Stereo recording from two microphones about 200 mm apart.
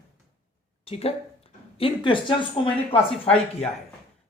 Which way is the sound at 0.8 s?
30° left (ahead or behind).